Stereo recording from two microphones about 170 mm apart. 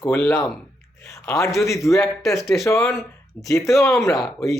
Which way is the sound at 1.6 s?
15° left (ahead or behind).